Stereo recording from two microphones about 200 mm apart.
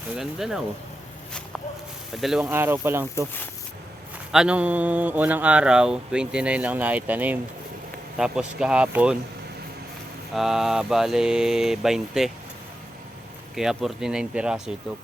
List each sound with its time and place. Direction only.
0.2 s mantra: centre (ahead or behind)
2.1 s speech: centre (ahead or behind)
4.3 s speech: 5° right (ahead or behind)
8.2 s mantra: 5° right (ahead or behind)
10.3 s mantra: centre (ahead or behind)
13.6 s mantra: centre (ahead or behind)